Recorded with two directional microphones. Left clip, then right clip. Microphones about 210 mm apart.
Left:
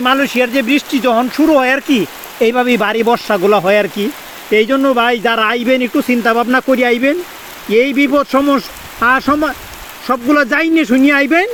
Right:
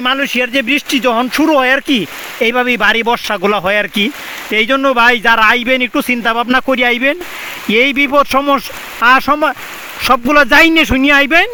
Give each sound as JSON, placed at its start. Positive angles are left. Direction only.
{"t": 0.0, "sound": "speech", "side_deg": -30}